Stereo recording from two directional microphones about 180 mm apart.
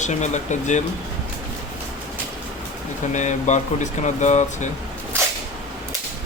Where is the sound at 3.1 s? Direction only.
40° left (ahead or behind).